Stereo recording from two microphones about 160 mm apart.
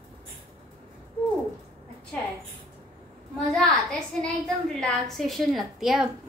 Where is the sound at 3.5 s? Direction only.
Centre (ahead or behind).